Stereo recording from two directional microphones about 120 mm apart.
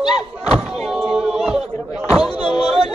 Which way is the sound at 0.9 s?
Centre (ahead or behind).